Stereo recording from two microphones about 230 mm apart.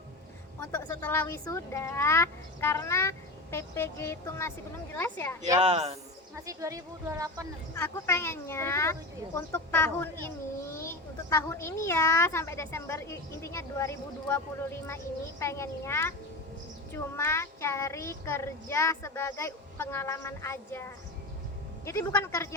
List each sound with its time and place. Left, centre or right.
0.7 s a woman's voice: centre
5.5 s speech: right
6.3 s speech: centre
7.8 s a woman's voice: centre